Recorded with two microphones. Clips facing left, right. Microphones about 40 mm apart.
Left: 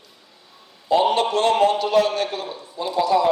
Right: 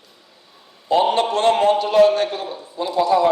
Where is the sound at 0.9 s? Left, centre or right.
Right.